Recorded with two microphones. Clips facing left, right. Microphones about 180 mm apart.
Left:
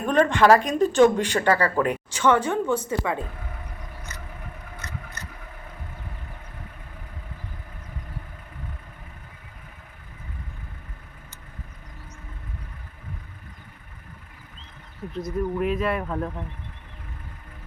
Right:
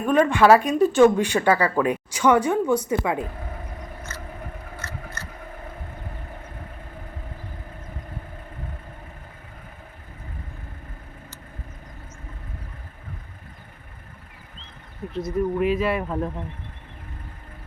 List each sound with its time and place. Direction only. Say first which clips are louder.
0.0 s speech: right 1 dB; 10° right (ahead or behind)
4.1 s a sound: right 4 dB; 15° left (ahead or behind)
15.1 s speech: right 3 dB; centre (ahead or behind)